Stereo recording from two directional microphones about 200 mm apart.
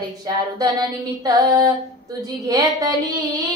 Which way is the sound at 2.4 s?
15° right (ahead or behind).